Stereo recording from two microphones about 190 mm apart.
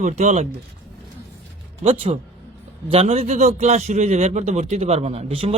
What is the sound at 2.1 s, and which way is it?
A man's voice, 30° right (ahead or behind).